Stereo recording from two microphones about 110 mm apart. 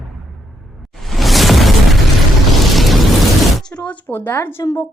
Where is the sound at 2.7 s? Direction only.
Centre (ahead or behind).